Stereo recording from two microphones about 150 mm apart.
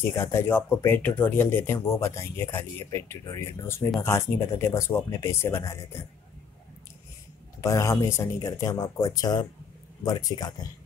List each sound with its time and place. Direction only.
0.0 s speech: 15° left (ahead or behind)
7.6 s speech: 20° left (ahead or behind)